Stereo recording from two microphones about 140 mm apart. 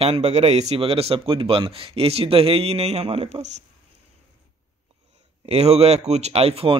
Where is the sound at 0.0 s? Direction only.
45° right (ahead or behind).